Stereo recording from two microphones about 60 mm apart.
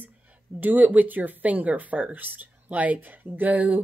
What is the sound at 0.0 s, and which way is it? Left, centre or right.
Speech, right.